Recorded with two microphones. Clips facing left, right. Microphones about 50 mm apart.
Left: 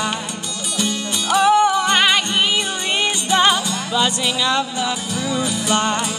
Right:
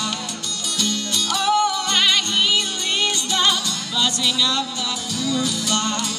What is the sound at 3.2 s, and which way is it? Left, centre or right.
Music, left.